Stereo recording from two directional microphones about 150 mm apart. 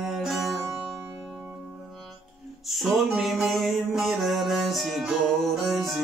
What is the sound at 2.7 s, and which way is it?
Music, centre (ahead or behind).